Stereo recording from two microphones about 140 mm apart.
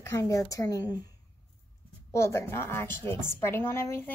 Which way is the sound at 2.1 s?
20° left (ahead or behind).